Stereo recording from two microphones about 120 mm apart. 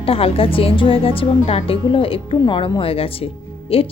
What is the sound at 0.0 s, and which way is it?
A woman's voice, 50° left (ahead or behind).